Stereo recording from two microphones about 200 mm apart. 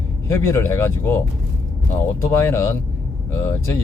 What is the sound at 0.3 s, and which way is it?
Speech, 15° left (ahead or behind).